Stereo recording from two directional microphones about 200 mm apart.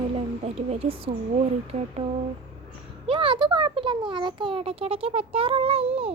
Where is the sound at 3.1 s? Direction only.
25° right (ahead or behind).